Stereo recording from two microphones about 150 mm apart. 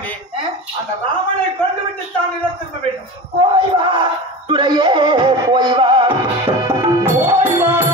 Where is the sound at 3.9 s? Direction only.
30° right (ahead or behind).